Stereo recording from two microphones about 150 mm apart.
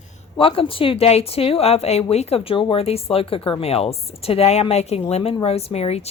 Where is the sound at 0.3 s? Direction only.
35° left (ahead or behind).